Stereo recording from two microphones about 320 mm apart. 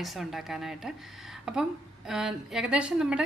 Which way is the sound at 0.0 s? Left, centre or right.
Centre.